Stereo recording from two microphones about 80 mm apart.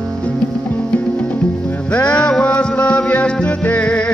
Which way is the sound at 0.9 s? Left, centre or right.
Centre.